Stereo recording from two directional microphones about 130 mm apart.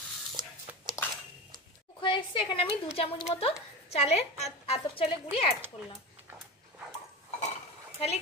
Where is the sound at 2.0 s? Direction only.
40° left (ahead or behind).